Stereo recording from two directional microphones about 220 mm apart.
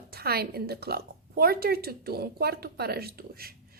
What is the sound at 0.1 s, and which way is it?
A woman's voice, 45° right (ahead or behind).